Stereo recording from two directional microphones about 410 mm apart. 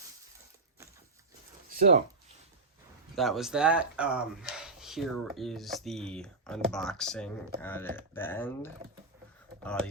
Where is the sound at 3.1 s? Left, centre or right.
Centre.